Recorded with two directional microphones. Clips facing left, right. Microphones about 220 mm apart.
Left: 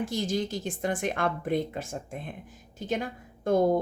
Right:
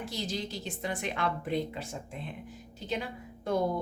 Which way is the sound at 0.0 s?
50° left (ahead or behind).